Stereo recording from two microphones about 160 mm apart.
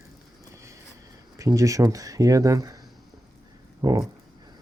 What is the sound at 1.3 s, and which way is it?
Speech, 20° right (ahead or behind).